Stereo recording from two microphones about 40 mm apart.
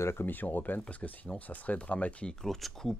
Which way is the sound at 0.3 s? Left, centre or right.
Left.